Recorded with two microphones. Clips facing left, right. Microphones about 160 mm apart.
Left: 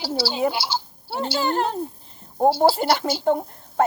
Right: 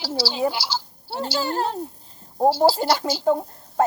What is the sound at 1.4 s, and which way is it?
Speech, 35° right (ahead or behind).